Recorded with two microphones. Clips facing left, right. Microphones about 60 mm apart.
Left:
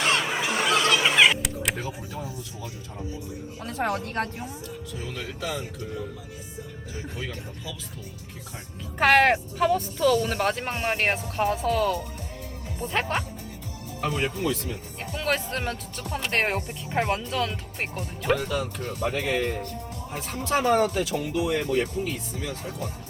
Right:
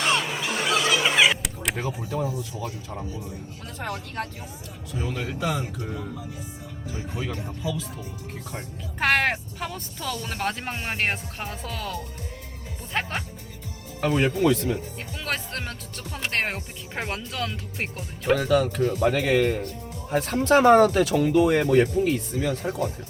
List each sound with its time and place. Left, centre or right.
0.0 s fowl: centre
0.4 s a sound: centre
1.7 s a sound: right
9.0 s speech: centre
14.1 s speech: right
15.1 s speech: centre
18.3 s speech: right